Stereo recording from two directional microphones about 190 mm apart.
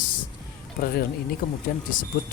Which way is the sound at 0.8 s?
50° left (ahead or behind).